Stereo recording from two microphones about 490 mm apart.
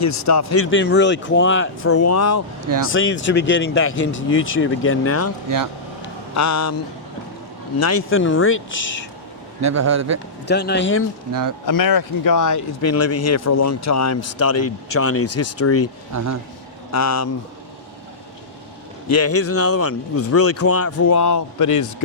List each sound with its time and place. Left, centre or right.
0.0 s speech: left
6.3 s speech: left
7.8 s speech: left
9.6 s speech: right
10.4 s speech: centre
11.3 s speech: right
11.6 s speech: left
16.1 s speech: right
16.9 s speech: left
19.0 s speech: left